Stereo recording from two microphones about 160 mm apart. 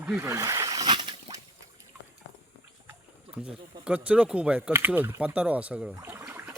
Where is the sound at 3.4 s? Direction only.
5° right (ahead or behind).